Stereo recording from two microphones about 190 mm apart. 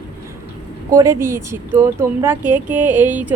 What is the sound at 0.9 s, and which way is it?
Speech, 15° right (ahead or behind).